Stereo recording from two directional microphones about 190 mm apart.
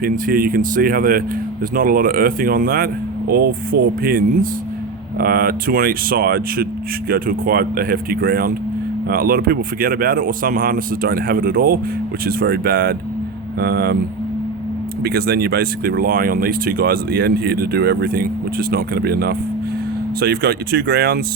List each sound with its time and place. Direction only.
0.0 s speech: 50° right (ahead or behind)
15.0 s speech: 55° right (ahead or behind)